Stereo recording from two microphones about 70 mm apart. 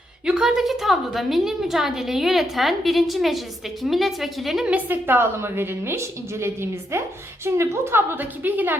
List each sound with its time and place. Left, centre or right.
0.3 s a woman's voice: centre
4.6 s a woman's voice: centre
5.0 s a woman's voice: right